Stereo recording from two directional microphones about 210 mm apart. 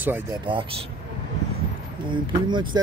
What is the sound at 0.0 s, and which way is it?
Speech, 10° right (ahead or behind).